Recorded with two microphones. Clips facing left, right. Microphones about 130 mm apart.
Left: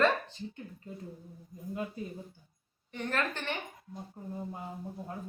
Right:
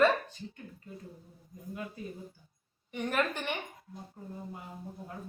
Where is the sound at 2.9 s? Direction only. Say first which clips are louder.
Right 2 dB; 15° right (ahead or behind).